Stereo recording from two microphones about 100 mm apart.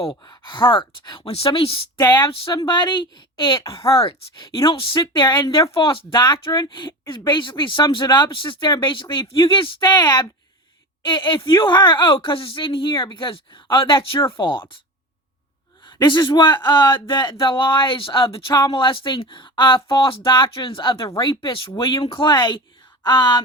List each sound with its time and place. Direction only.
0.3 s speech: 55° left (ahead or behind)
1.3 s speech: 70° left (ahead or behind)
2.0 s speech: 50° left (ahead or behind)
3.7 s speech: 65° left (ahead or behind)
16.0 s speech: 50° left (ahead or behind)